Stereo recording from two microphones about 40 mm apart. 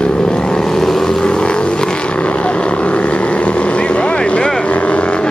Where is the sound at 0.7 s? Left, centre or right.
Centre.